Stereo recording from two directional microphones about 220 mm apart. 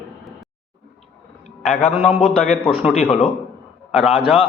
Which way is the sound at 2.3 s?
5° right (ahead or behind).